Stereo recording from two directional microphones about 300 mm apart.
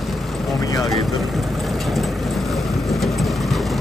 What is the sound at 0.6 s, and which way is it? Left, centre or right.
Boat, centre.